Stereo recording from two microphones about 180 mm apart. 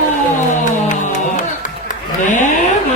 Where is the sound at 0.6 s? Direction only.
45° left (ahead or behind).